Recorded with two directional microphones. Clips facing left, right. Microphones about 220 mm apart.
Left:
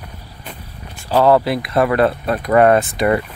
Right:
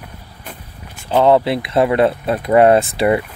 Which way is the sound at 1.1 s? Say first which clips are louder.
Right 1 dB; 20° right (ahead or behind).